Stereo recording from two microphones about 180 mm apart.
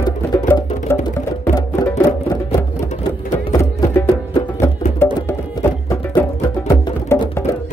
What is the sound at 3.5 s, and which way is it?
Music, 15° left (ahead or behind).